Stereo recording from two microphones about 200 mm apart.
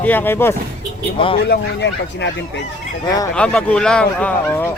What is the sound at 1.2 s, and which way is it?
Speech, 25° left (ahead or behind).